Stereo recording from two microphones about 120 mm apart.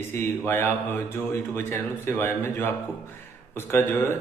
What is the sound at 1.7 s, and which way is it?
A man's voice, 20° left (ahead or behind).